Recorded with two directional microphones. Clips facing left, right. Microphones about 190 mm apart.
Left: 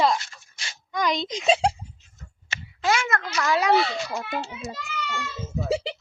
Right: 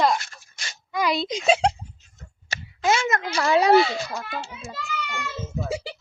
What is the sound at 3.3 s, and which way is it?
Speech, 30° right (ahead or behind).